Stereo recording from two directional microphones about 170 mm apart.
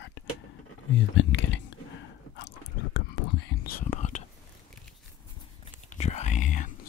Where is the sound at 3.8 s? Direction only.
45° left (ahead or behind).